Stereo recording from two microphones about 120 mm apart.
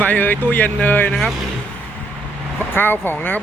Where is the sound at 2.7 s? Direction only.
15° left (ahead or behind).